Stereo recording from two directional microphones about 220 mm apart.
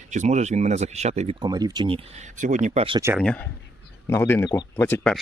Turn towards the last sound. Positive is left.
turn(degrees=5)  # may be behind; listen again after turning